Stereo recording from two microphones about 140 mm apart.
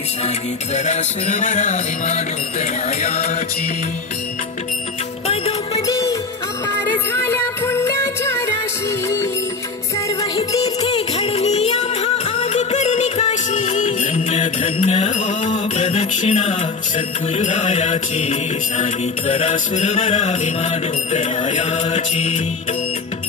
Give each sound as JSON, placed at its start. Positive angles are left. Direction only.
{"t": 0.7, "sound": "music", "side_deg": 55}
{"t": 5.9, "sound": "music", "side_deg": 25}
{"t": 10.9, "sound": "music", "side_deg": 45}
{"t": 15.9, "sound": "music", "side_deg": 50}